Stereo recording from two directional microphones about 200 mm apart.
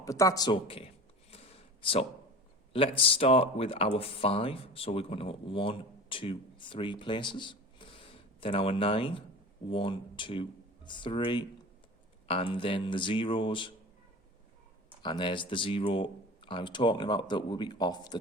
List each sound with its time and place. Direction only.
0.0 s a sound: 15° left (ahead or behind)
2.7 s speech: 25° left (ahead or behind)
15.0 s speech: 25° left (ahead or behind)